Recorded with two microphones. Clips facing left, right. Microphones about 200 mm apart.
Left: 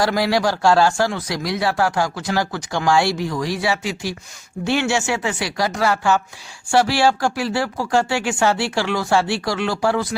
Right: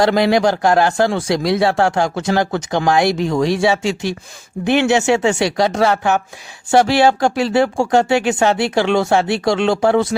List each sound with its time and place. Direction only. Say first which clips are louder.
0.0 s speech: right 5 dB; 20° right (ahead or behind)